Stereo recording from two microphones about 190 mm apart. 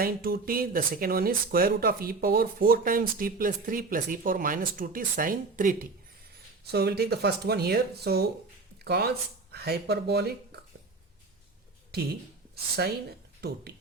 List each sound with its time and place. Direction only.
0.0 s speech: 50° right (ahead or behind)
6.7 s speech: 60° right (ahead or behind)
12.7 s speech: 55° right (ahead or behind)